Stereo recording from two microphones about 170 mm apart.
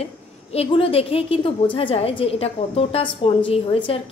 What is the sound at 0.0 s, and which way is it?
A woman's voice, 35° left (ahead or behind).